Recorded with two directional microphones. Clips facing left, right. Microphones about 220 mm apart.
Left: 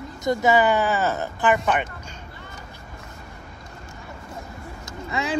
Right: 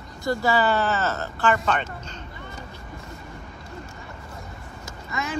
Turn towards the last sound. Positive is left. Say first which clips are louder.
# left 4 dB
turn(degrees=30)  # may be behind; listen again after turning